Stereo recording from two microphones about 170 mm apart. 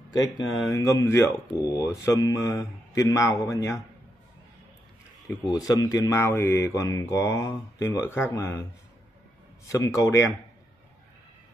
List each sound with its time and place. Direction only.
0.1 s speech: 20° left (ahead or behind)
5.5 s speech: 20° left (ahead or behind)
9.7 s speech: 20° left (ahead or behind)